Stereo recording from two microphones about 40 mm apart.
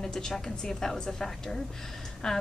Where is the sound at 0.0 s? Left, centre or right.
Centre.